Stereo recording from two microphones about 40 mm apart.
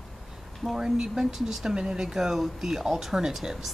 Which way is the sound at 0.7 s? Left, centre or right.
Centre.